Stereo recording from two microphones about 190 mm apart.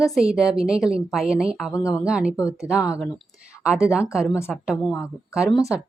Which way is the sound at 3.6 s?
5° right (ahead or behind).